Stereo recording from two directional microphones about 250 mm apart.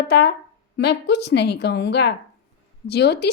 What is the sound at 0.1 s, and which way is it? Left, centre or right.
A woman's voice, left.